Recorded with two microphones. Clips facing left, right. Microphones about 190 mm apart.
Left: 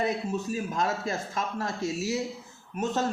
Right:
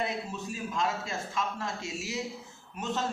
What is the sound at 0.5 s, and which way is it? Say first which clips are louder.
A man's voice: right 1 dB; 45° left (ahead or behind).